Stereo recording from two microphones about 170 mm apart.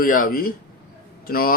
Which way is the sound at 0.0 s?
55° left (ahead or behind).